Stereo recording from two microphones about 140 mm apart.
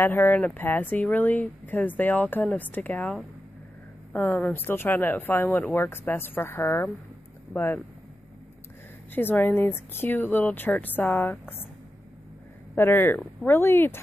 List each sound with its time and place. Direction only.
0.0 s speech: 15° left (ahead or behind)
9.1 s speech: 15° left (ahead or behind)
12.7 s speech: 15° left (ahead or behind)